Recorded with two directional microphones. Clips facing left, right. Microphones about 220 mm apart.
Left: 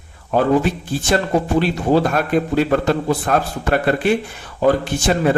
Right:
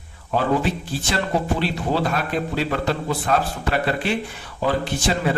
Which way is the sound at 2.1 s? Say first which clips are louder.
Left 7 dB; 50° left (ahead or behind).